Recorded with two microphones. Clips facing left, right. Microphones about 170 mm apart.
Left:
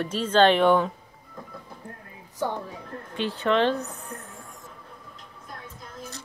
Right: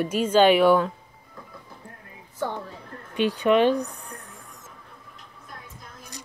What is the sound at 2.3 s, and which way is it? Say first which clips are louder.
Speech: left 1 dB; 15° left (ahead or behind).